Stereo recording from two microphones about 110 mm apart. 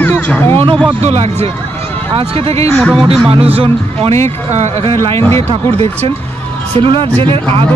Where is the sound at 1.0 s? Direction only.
70° right (ahead or behind).